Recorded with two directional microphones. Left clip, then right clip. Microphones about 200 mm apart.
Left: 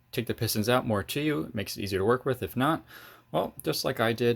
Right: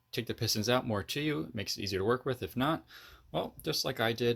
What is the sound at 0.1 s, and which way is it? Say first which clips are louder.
Speech: left 3 dB; centre (ahead or behind).